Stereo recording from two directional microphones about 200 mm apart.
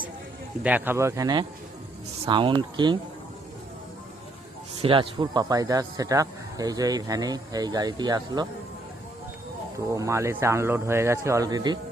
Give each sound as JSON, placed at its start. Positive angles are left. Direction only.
{"t": 0.6, "sound": "a man's voice", "side_deg": -10}
{"t": 4.8, "sound": "a man's voice", "side_deg": -25}
{"t": 9.7, "sound": "speech", "side_deg": -15}